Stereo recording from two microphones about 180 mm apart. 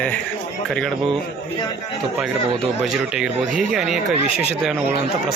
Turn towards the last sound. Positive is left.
turn(degrees=-5)  # may be behind; listen again after turning